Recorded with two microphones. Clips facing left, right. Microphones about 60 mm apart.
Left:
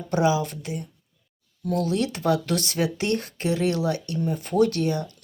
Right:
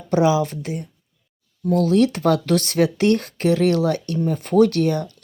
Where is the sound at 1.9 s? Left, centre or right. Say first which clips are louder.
Right 7 dB; right.